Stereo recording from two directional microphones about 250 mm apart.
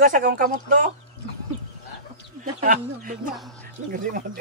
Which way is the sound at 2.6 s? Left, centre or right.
Right.